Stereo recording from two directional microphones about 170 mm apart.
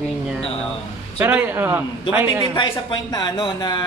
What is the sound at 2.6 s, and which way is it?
Speech, 25° left (ahead or behind).